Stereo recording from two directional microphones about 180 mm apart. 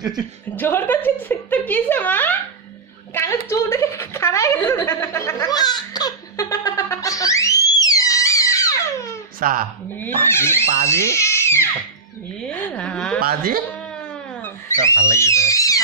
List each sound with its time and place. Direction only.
0.6 s a woman's voice: 10° left (ahead or behind)
9.4 s a woman's voice: 50° right (ahead or behind)
9.9 s speech: 10° left (ahead or behind)
12.7 s speech: 5° left (ahead or behind)
14.4 s a sound: 15° left (ahead or behind)